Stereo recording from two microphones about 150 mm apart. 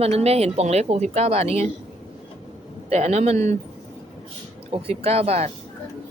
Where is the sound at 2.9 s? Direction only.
45° right (ahead or behind).